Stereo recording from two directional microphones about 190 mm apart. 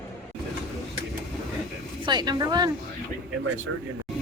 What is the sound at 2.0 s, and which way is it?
Speech, 25° right (ahead or behind).